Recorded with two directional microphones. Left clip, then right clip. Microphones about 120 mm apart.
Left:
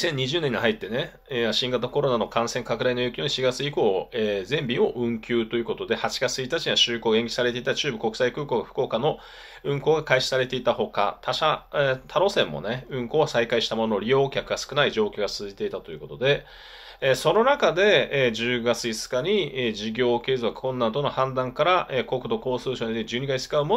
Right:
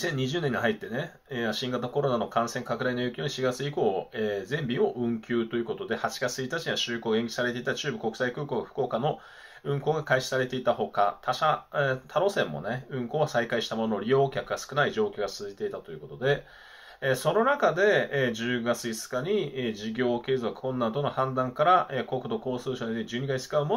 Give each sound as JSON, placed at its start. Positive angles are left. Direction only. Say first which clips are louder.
{"t": 0.0, "sound": "speech", "louder": "left 5 dB", "side_deg": 20}